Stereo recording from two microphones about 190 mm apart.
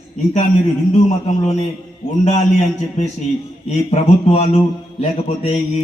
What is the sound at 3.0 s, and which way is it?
Mantra, 35° left (ahead or behind).